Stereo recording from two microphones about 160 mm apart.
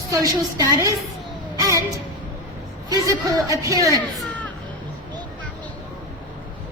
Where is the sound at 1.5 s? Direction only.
20° right (ahead or behind).